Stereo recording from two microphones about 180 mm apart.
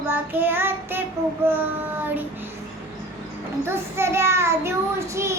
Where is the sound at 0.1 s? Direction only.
10° right (ahead or behind).